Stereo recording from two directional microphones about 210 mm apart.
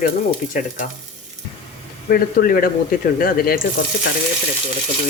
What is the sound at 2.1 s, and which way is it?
Stir, 45° left (ahead or behind).